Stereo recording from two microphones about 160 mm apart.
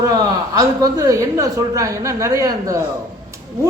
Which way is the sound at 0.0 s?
20° right (ahead or behind).